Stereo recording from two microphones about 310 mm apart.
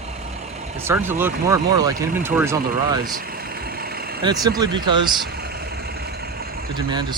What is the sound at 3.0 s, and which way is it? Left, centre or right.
Vehicle, right.